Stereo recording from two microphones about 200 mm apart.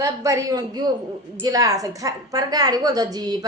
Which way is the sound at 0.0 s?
15° right (ahead or behind).